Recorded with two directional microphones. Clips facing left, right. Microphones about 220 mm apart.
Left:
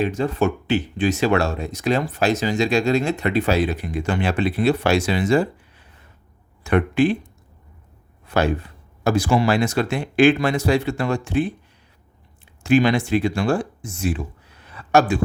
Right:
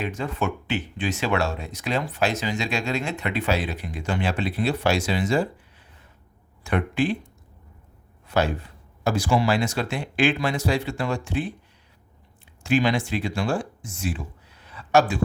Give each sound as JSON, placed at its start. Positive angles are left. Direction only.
{"t": 0.0, "sound": "speech", "side_deg": 35}
{"t": 6.7, "sound": "speech", "side_deg": 55}
{"t": 9.0, "sound": "speech", "side_deg": 55}
{"t": 12.6, "sound": "speech", "side_deg": 50}
{"t": 14.6, "sound": "a sound", "side_deg": 50}